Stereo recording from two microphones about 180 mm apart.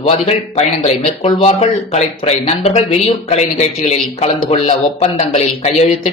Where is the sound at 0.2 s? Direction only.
35° left (ahead or behind).